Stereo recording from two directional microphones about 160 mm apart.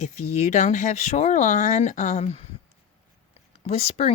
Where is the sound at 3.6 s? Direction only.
40° left (ahead or behind).